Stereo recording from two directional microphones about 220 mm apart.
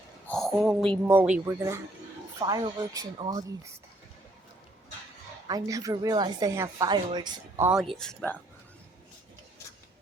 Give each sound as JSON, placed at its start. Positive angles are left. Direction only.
{"t": 0.3, "sound": "a woman's voice", "side_deg": 0}
{"t": 5.5, "sound": "a woman's voice", "side_deg": -15}
{"t": 7.9, "sound": "speech", "side_deg": 5}